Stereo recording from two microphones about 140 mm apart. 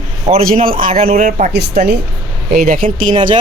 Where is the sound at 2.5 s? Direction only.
85° right.